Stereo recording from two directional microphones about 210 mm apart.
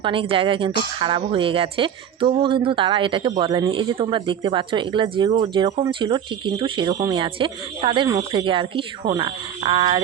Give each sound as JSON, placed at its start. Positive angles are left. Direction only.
{"t": 0.0, "sound": "speech", "side_deg": -25}